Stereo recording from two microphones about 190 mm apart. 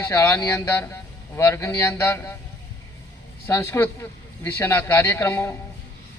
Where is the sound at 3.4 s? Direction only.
15° left (ahead or behind).